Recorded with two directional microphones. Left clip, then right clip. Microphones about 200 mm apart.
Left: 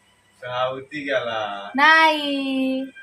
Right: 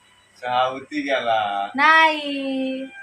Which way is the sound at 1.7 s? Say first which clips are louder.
Left 1 dB; 20° left (ahead or behind).